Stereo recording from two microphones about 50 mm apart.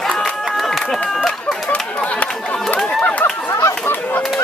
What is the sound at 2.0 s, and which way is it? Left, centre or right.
Chatter, left.